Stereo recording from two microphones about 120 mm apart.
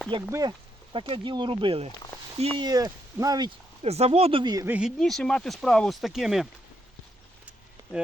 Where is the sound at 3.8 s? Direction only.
60° right (ahead or behind).